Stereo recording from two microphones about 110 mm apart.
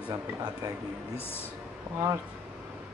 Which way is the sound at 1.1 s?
20° left (ahead or behind).